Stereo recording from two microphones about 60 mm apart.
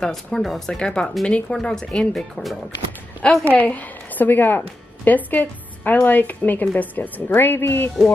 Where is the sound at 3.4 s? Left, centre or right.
Left.